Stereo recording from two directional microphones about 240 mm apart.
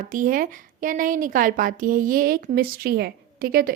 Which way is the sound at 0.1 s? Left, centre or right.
Right.